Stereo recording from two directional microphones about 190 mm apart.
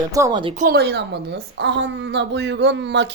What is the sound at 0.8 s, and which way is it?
A woman's voice, 60° right (ahead or behind).